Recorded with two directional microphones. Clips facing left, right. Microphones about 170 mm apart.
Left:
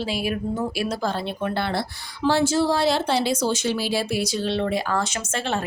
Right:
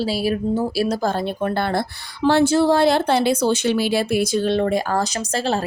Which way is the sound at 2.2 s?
60° right (ahead or behind).